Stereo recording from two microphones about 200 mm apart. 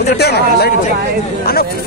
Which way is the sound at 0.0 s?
55° left (ahead or behind).